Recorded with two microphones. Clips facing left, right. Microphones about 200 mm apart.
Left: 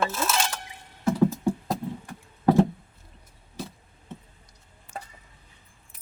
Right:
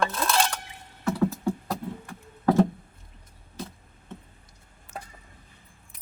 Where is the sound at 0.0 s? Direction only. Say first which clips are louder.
Right 1 dB; 5° left (ahead or behind).